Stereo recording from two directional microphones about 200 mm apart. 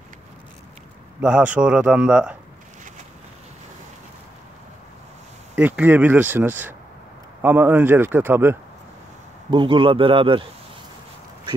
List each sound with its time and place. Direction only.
1.2 s speech: 5° right (ahead or behind)
5.6 s speech: 10° right (ahead or behind)
9.5 s a man's voice: 25° right (ahead or behind)